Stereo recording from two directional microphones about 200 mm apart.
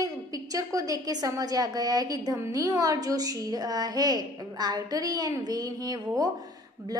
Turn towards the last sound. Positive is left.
turn(degrees=-20)  # may be behind; listen again after turning